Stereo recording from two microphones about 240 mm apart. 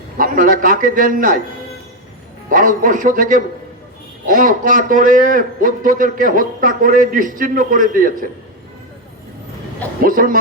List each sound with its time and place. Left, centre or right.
0.2 s a man's voice: right
2.5 s a man's voice: right
10.0 s a sound: right